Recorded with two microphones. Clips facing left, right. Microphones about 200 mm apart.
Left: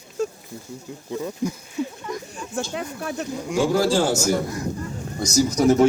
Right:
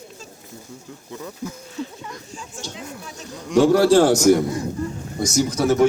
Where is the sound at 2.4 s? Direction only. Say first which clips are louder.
Left 8 dB; 60° left (ahead or behind).